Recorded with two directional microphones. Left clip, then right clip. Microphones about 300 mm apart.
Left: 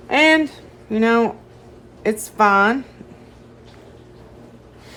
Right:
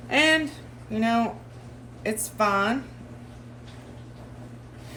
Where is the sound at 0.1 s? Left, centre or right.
Left.